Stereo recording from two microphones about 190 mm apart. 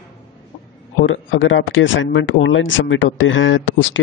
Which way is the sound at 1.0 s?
90° left.